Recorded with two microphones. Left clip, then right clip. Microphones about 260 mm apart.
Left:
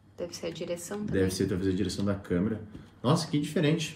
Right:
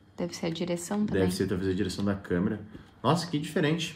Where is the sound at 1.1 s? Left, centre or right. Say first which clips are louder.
Left 1 dB; centre.